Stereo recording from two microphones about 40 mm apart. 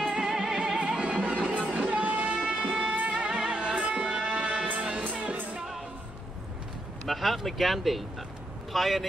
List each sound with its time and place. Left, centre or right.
0.1 s music: centre
1.6 s a sound: right
2.7 s music: right
4.6 s music: right
5.0 s music: right
7.1 s speech: centre